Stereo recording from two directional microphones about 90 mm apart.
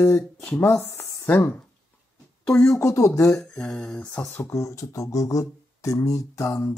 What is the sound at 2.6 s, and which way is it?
Speech, 30° left (ahead or behind).